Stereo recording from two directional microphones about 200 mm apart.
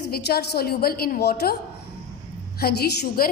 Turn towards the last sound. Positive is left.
turn(degrees=50)  # may be behind; listen again after turning